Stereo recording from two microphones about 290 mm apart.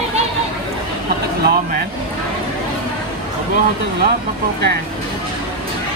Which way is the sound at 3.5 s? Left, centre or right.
Right.